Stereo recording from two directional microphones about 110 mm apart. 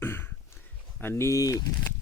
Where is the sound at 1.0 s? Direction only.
25° left (ahead or behind).